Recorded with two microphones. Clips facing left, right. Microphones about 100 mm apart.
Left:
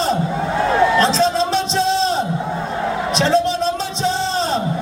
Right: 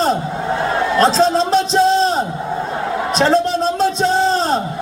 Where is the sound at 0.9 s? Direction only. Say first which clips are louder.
Right 2 dB; 40° right (ahead or behind).